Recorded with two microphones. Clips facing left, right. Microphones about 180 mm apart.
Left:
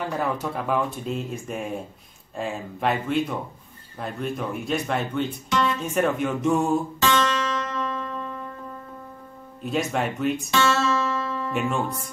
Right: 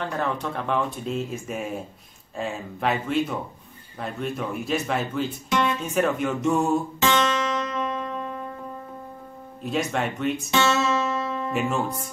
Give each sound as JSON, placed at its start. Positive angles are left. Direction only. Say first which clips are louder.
{"t": 0.0, "sound": "speech", "louder": "left 1 dB", "side_deg": 10}
{"t": 7.0, "sound": "music", "louder": "even", "side_deg": -20}
{"t": 9.6, "sound": "speech", "louder": "left 1 dB", "side_deg": 0}
{"t": 10.5, "sound": "music", "louder": "right 1 dB", "side_deg": -20}
{"t": 11.5, "sound": "speech", "louder": "even", "side_deg": 0}